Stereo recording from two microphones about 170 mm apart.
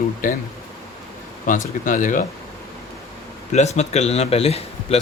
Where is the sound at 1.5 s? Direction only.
50° left (ahead or behind).